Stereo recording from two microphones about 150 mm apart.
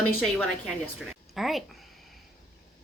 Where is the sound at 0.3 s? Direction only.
5° left (ahead or behind).